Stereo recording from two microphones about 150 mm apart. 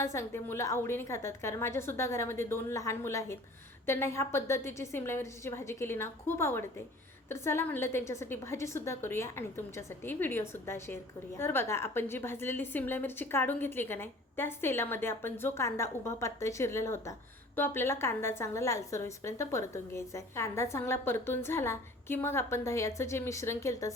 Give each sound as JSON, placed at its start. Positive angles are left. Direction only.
{"t": 0.0, "sound": "a woman's voice", "side_deg": 15}